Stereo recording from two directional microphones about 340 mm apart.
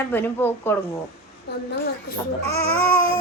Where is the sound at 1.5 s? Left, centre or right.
Left.